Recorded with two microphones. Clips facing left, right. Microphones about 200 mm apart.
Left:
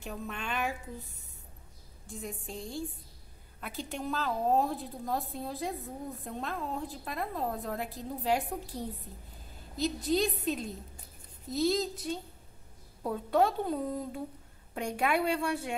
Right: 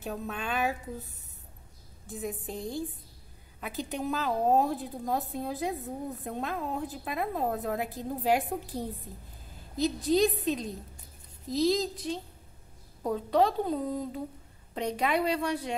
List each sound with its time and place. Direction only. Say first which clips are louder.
0.0 s a woman's voice: right 4 dB; 5° right (ahead or behind)
9.8 s a woman's voice: right 4 dB; centre (ahead or behind)